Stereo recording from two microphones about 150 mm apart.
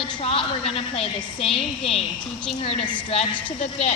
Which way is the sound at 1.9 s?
5° left (ahead or behind).